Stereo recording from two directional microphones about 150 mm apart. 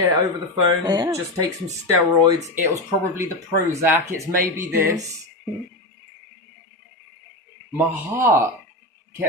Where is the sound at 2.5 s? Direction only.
15° right (ahead or behind).